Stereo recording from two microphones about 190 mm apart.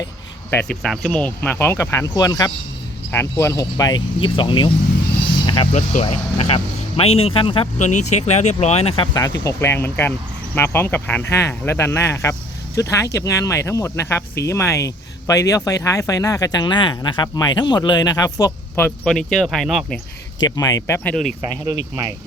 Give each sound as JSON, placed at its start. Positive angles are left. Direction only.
{"t": 0.5, "sound": "speech", "side_deg": 5}
{"t": 5.7, "sound": "speech", "side_deg": 35}
{"t": 7.8, "sound": "speech", "side_deg": 40}
{"t": 9.4, "sound": "speech", "side_deg": 15}
{"t": 20.6, "sound": "speech", "side_deg": 20}
{"t": 21.6, "sound": "speech", "side_deg": -15}